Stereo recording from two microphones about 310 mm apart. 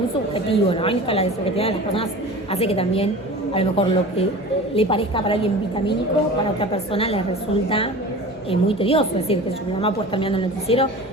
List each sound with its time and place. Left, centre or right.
0.3 s a woman's voice: centre
8.4 s a woman's voice: centre